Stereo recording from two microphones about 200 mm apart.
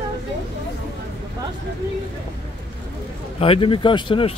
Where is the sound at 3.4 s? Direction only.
25° left (ahead or behind).